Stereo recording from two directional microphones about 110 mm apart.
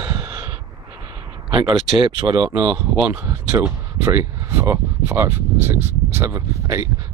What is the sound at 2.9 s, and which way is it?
Speech, 20° right (ahead or behind).